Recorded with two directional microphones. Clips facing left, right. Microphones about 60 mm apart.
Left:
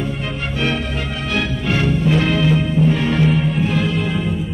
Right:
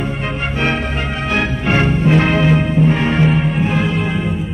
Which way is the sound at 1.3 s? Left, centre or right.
Right.